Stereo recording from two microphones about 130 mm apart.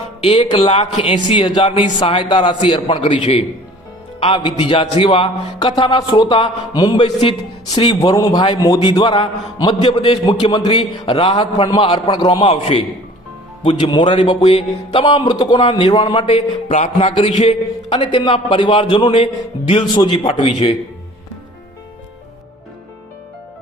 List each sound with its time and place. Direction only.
0.5 s a man's voice: 50° left (ahead or behind); by 10.7 s 30° left (ahead or behind)
10.8 s a man's voice: 45° left (ahead or behind)
11.5 s a man's voice: 30° left (ahead or behind)
11.8 s a man's voice: 40° left (ahead or behind)
12.5 s a man's voice: 45° left (ahead or behind)